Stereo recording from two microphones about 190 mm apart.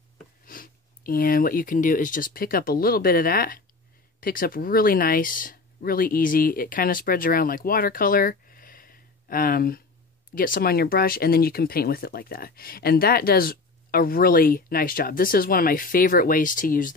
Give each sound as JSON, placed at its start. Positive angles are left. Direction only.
{"t": 0.5, "sound": "speech", "side_deg": 50}